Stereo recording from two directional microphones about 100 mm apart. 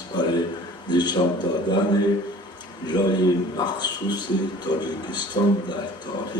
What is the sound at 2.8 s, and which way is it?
A man's voice, 45° left (ahead or behind).